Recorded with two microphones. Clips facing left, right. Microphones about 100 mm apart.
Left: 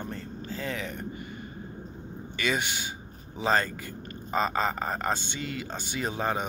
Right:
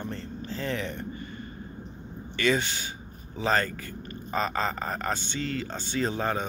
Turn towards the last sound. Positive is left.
turn(degrees=15)  # may be behind; listen again after turning